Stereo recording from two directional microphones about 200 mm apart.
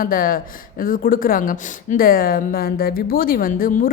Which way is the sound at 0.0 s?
45° left (ahead or behind).